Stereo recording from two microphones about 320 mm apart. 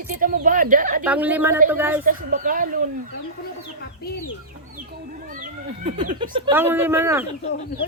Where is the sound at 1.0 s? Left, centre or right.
Centre.